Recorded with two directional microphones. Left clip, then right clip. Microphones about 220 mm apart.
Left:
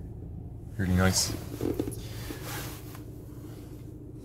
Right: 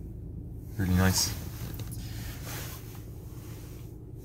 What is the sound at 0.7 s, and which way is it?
Speech, 5° right (ahead or behind).